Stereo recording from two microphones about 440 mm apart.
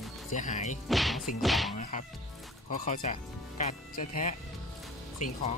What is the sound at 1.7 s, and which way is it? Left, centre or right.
Speech, centre.